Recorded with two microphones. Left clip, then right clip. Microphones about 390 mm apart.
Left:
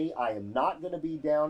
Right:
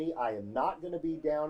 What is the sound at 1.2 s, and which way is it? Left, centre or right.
Speech, left.